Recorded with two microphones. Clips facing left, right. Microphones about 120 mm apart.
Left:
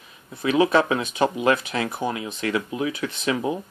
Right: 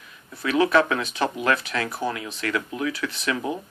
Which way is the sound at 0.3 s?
20° left (ahead or behind).